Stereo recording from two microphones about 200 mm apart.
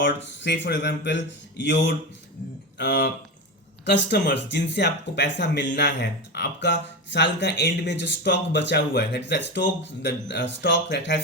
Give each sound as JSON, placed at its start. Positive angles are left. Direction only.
{"t": 0.0, "sound": "speech", "side_deg": 65}